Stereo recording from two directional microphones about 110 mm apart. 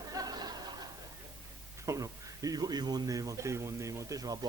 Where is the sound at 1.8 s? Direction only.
30° right (ahead or behind).